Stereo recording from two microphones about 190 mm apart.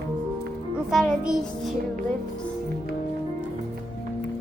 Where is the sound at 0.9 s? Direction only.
Centre (ahead or behind).